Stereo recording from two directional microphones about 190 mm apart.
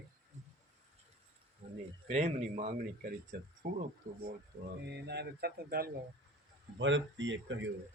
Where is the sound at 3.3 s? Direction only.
55° right (ahead or behind).